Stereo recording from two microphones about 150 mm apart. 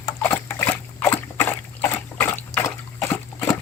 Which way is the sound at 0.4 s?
10° left (ahead or behind).